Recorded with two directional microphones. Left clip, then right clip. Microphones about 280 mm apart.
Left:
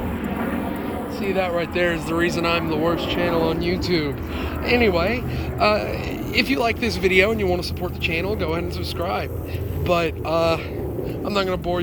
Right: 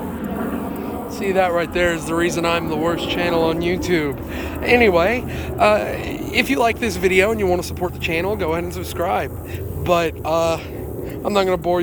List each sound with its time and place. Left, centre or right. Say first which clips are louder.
1.2 s speech: right 5 dB; centre
11.3 s speech: right 6 dB; centre